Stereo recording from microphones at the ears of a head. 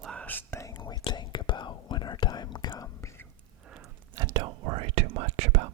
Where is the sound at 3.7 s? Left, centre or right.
Right.